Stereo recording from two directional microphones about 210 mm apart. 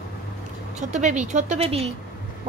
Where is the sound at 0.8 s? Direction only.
35° right (ahead or behind).